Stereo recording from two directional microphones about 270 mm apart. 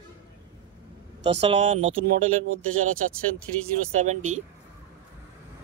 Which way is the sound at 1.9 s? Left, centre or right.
Right.